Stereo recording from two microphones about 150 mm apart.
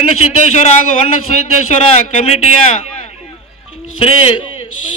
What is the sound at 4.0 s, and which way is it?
Speech, 40° left (ahead or behind).